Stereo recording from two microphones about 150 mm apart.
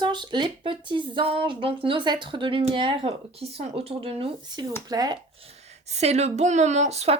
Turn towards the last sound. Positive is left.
turn(degrees=-45)  # may be behind; listen again after turning